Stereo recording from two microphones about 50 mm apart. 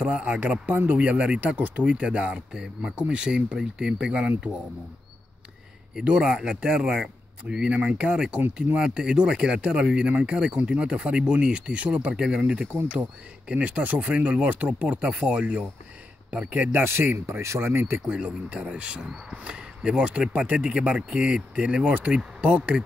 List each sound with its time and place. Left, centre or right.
0.0 s speech: right
6.1 s speech: centre
12.4 s speech: right
16.8 s speech: right
18.0 s speech: right